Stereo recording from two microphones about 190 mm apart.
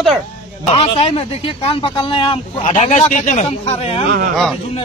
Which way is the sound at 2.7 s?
35° left (ahead or behind).